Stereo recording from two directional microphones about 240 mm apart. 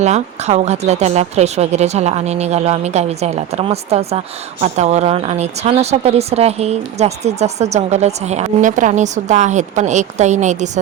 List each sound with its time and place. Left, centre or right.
0.0 s speech: right